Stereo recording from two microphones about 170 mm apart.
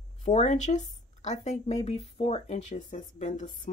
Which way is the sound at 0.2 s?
40° left (ahead or behind).